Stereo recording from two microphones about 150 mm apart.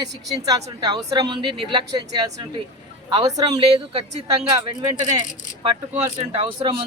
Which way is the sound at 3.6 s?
40° right (ahead or behind).